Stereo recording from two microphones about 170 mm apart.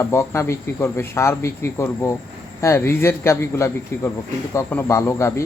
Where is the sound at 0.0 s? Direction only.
15° left (ahead or behind).